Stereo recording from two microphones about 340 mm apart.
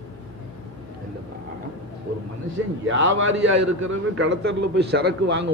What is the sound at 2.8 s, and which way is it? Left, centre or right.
A man's voice, right.